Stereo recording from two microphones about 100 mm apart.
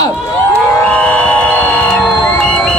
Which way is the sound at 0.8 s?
10° left (ahead or behind).